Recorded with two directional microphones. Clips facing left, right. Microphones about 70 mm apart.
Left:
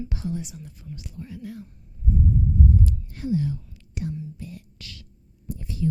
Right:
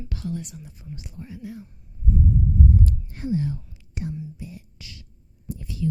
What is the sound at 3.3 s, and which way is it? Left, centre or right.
Speech, right.